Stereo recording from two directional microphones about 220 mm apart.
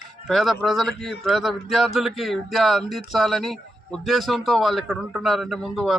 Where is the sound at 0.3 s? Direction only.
Centre (ahead or behind).